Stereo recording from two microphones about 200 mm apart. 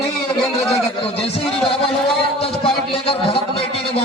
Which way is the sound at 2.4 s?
30° left (ahead or behind).